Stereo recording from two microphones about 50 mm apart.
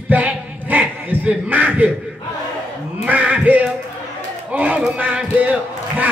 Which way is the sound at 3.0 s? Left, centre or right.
Right.